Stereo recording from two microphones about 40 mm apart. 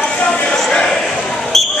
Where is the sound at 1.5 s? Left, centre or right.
Centre.